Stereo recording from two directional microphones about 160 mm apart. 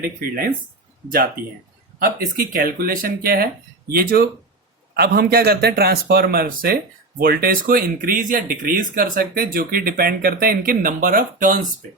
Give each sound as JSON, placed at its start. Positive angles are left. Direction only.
{"t": 0.0, "sound": "speech", "side_deg": -65}
{"t": 2.0, "sound": "speech", "side_deg": -65}